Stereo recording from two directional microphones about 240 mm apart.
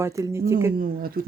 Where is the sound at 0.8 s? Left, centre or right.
Right.